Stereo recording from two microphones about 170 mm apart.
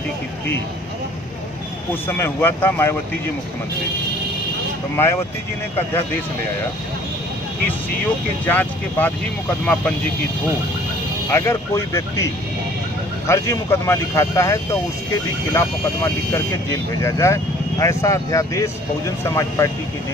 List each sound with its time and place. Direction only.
2.0 s speech: 15° left (ahead or behind)
4.9 s speech: 15° left (ahead or behind)
8.0 s speech: 10° left (ahead or behind)
11.2 s speech: 15° left (ahead or behind)
13.3 s speech: 15° left (ahead or behind)